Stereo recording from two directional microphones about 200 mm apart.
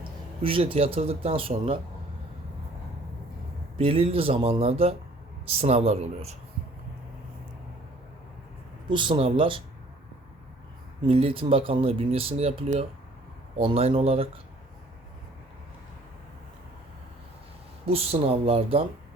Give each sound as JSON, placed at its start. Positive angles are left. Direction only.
{"t": 0.4, "sound": "speech", "side_deg": -25}
{"t": 3.8, "sound": "speech", "side_deg": -25}
{"t": 8.9, "sound": "speech", "side_deg": -25}
{"t": 11.0, "sound": "speech", "side_deg": -25}
{"t": 17.8, "sound": "speech", "side_deg": -30}